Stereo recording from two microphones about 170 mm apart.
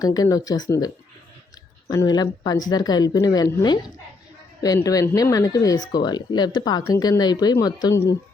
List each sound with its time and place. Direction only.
0.0 s speech: 20° left (ahead or behind)
1.9 s speech: 20° left (ahead or behind)